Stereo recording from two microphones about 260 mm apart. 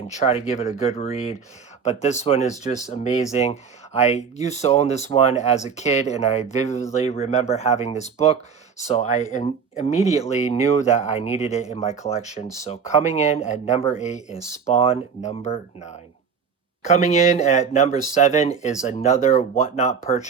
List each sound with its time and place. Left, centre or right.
0.2 s speech: left